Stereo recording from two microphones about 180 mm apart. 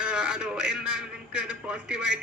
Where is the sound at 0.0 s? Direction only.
5° right (ahead or behind).